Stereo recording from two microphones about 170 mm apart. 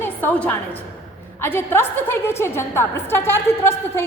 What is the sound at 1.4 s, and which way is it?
A woman's voice, 15° left (ahead or behind).